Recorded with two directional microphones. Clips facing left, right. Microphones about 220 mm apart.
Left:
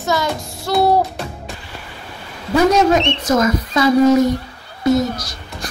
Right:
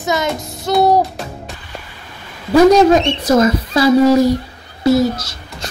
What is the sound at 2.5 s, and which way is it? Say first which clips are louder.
A child's voice: right 5 dB; 35° right (ahead or behind).